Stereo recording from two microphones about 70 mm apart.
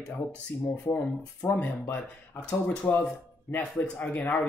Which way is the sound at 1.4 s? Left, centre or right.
Left.